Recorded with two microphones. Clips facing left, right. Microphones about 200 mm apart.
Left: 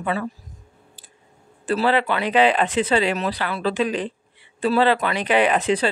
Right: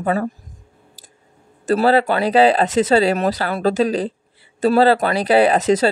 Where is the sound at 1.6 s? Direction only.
40° right (ahead or behind).